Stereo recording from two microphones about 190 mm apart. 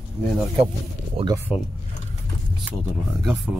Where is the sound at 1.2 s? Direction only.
30° right (ahead or behind).